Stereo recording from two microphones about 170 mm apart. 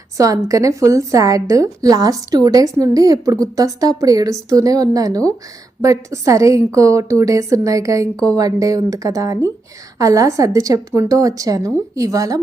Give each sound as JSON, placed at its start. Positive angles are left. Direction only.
{"t": 0.2, "sound": "a woman's voice", "side_deg": -20}